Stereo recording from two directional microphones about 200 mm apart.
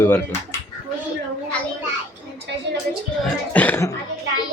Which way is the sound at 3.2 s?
10° left (ahead or behind).